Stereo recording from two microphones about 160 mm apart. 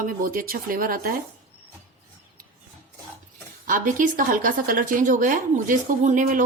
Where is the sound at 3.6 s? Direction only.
55° right (ahead or behind).